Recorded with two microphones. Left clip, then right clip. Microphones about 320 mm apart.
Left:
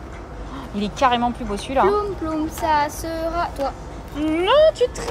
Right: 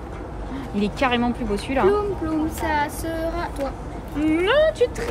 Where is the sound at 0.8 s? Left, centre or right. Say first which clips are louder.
Left 3 dB; centre.